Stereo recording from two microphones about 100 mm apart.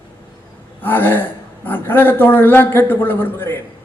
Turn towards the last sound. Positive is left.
turn(degrees=20)  # may be behind; listen again after turning